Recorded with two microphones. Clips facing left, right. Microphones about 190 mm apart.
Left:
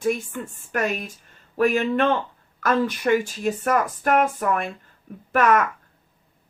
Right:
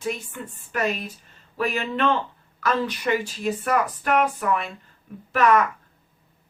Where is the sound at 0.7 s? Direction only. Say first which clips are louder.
Left 1 dB; 50° left (ahead or behind).